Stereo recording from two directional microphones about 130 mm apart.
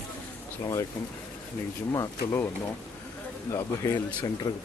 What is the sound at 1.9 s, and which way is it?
Speech, 20° left (ahead or behind).